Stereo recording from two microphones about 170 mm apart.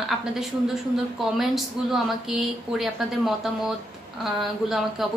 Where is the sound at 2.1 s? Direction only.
Centre (ahead or behind).